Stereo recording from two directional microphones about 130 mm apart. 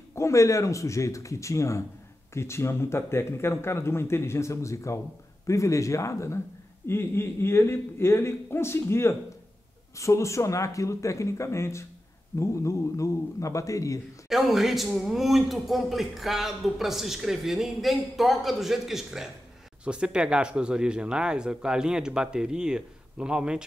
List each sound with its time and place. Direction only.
0.1 s speech: 20° left (ahead or behind)
14.3 s speech: centre (ahead or behind)